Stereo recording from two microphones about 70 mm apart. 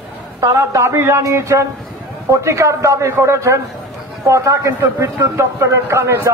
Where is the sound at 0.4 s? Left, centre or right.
Right.